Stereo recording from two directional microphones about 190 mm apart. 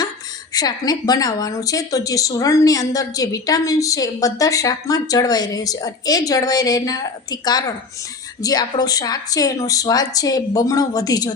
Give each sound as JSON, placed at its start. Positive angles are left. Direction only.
{"t": 0.5, "sound": "a woman's voice", "side_deg": 20}